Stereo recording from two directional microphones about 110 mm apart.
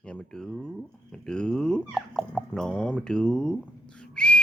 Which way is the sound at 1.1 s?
5° left (ahead or behind).